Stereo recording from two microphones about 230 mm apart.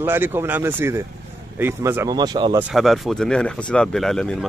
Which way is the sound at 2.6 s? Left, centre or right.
Centre.